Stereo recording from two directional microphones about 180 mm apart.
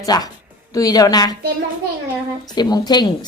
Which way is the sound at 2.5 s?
25° left (ahead or behind).